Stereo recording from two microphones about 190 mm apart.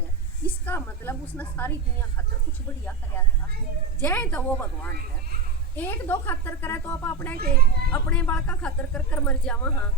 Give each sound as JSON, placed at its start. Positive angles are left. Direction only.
{"t": 0.4, "sound": "speech", "side_deg": 10}
{"t": 4.0, "sound": "speech", "side_deg": 10}
{"t": 7.3, "sound": "a child's voice", "side_deg": -55}
{"t": 7.9, "sound": "speech", "side_deg": 5}